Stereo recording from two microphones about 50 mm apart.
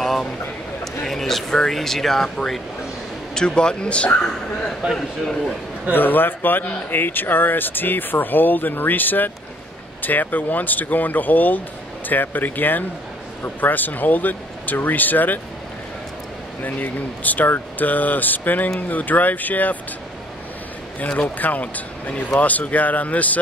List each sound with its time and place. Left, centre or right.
0.0 s a sound: centre
1.0 s speech: centre
3.3 s a man's voice: centre
4.8 s a man's voice: centre
5.9 s speech: left
16.6 s speech: left
21.4 s speech: left